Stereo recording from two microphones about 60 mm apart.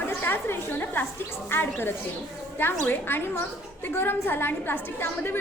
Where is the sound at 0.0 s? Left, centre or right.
Left.